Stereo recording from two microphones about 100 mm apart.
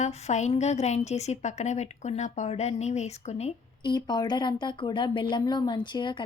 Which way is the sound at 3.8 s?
45° left (ahead or behind).